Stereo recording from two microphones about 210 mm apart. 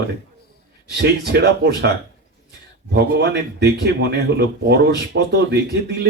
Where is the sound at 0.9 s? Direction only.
50° right (ahead or behind).